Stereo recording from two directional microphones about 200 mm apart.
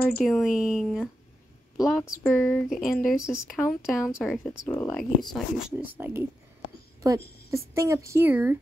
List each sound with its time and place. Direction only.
0.2 s speech: centre (ahead or behind)